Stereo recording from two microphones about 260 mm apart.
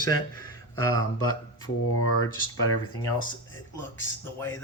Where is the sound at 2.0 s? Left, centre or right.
Left.